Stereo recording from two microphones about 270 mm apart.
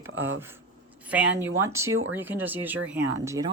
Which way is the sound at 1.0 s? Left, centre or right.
Centre.